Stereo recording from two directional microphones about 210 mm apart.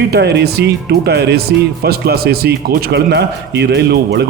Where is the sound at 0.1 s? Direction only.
55° right (ahead or behind).